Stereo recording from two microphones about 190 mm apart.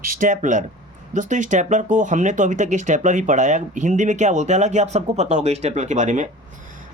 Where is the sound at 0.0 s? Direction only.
45° right (ahead or behind).